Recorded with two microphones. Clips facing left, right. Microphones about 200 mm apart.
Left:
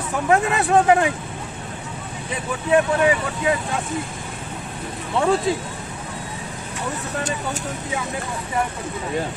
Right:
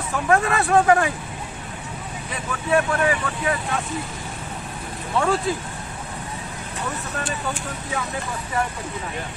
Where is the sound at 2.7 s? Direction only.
20° left (ahead or behind).